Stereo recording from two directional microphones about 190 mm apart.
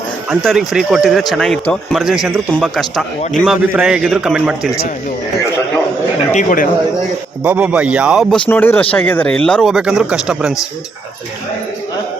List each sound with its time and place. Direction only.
0.3 s a man's voice: centre (ahead or behind)
6.3 s speech: 45° left (ahead or behind)
7.4 s a man's voice: 5° right (ahead or behind)